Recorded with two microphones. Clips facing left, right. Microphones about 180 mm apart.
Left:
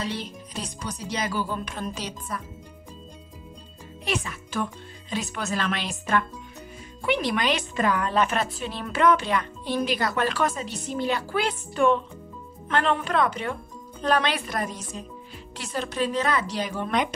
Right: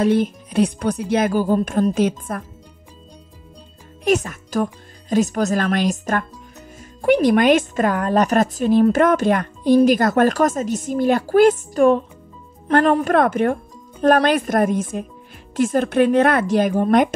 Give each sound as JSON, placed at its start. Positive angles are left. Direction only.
{"t": 0.0, "sound": "a woman's voice", "side_deg": -50}
{"t": 4.0, "sound": "a child's voice", "side_deg": -45}